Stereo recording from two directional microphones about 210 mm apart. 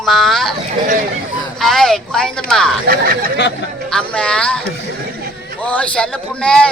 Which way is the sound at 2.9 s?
45° right (ahead or behind).